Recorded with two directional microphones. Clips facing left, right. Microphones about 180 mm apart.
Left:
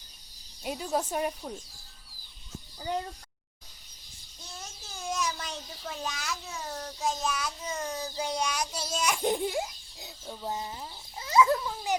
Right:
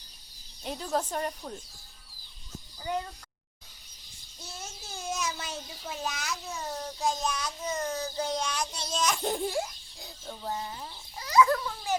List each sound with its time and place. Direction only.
0.6 s speech: 10° left (ahead or behind)
5.0 s a child's voice: 5° right (ahead or behind); by 10.8 s 20° left (ahead or behind)
11.2 s a sound: 25° left (ahead or behind)